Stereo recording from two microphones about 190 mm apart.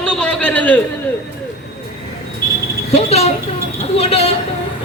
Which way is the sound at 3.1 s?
35° left (ahead or behind).